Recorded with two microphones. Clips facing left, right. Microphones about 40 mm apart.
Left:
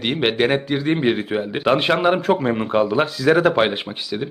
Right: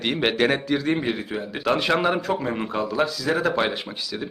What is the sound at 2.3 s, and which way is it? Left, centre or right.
A man's voice, left.